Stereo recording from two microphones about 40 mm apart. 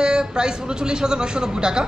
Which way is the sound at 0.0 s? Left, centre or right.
Centre.